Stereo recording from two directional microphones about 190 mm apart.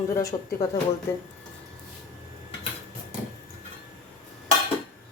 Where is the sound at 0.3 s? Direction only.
25° left (ahead or behind).